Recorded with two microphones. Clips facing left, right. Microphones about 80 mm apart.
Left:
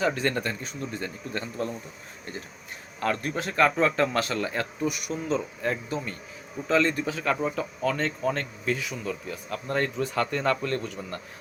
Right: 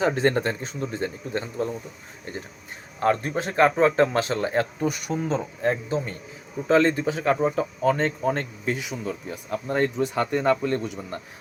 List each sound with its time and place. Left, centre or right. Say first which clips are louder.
0.0 s a man's voice: right 4 dB; right
3.0 s a man's voice: right 5 dB; right